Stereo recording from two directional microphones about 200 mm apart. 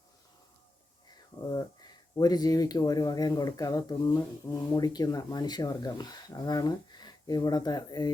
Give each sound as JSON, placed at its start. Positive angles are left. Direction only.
{"t": 1.5, "sound": "speech", "side_deg": 20}